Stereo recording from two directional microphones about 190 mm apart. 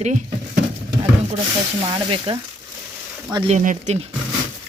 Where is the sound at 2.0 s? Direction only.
25° right (ahead or behind).